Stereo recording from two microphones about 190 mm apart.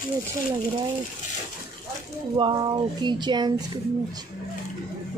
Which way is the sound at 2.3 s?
25° right (ahead or behind).